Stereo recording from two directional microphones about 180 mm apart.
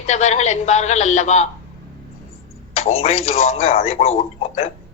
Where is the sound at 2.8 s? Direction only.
35° left (ahead or behind).